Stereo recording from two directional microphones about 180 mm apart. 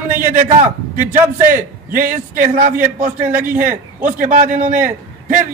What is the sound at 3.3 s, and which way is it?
Speech, 10° right (ahead or behind).